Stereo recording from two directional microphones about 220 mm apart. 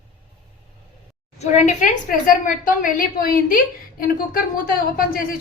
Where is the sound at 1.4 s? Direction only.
35° left (ahead or behind).